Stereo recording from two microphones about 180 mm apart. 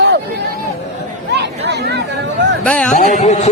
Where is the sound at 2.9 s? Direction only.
40° left (ahead or behind).